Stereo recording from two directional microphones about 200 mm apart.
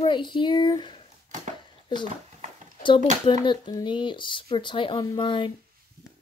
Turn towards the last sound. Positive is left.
turn(degrees=25)  # may be behind; listen again after turning